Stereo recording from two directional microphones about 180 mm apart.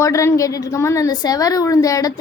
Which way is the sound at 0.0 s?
15° left (ahead or behind).